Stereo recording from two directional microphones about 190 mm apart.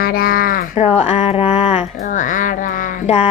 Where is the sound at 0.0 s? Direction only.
50° left (ahead or behind).